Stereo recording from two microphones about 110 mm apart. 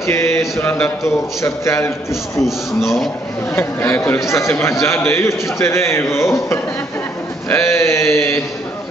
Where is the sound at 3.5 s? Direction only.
20° left (ahead or behind).